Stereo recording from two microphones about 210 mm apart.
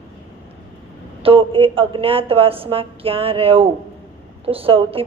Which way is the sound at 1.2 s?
25° right (ahead or behind).